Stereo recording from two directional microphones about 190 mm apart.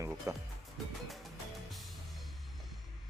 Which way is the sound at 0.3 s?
15° right (ahead or behind).